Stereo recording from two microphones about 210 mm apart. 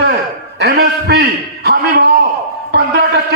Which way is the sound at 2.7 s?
50° right (ahead or behind).